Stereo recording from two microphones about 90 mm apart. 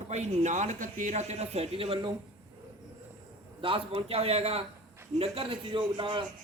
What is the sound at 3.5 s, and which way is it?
A man's voice, 85° right.